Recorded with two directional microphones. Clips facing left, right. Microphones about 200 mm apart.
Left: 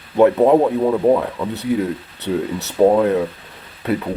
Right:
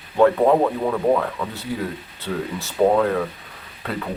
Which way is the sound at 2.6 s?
20° left (ahead or behind).